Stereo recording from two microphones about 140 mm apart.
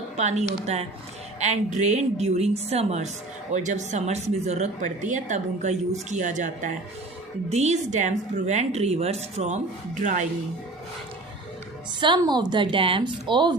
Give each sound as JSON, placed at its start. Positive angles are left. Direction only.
{"t": 0.2, "sound": "a woman's voice", "side_deg": -55}
{"t": 10.0, "sound": "a woman's voice", "side_deg": -65}
{"t": 11.9, "sound": "a woman's voice", "side_deg": -35}